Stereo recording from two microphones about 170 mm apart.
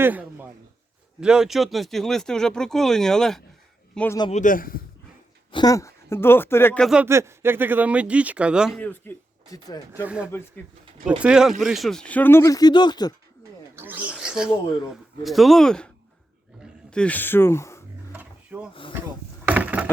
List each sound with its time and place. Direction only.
0.0 s a sound: 10° right (ahead or behind)
1.2 s a man's voice: 5° right (ahead or behind)
4.3 s a man's voice: 50° left (ahead or behind)
5.5 s a woman's voice: 25° left (ahead or behind)
6.8 s speech: 5° right (ahead or behind)
7.1 s speech: 15° right (ahead or behind)
8.8 s speech: 10° left (ahead or behind)
9.9 s speech: 10° right (ahead or behind); by 13.1 s 25° left (ahead or behind)
13.7 s speech: 10° right (ahead or behind)
16.9 s speech: 5° left (ahead or behind)
18.1 s drawer open or close: 10° right (ahead or behind)
18.7 s speech: 30° left (ahead or behind)
19.5 s coin: 10° right (ahead or behind)